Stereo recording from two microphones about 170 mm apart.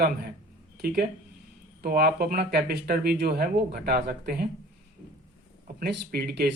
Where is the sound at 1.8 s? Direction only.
60° right (ahead or behind).